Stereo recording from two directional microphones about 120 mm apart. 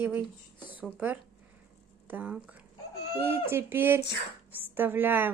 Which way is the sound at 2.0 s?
15° right (ahead or behind).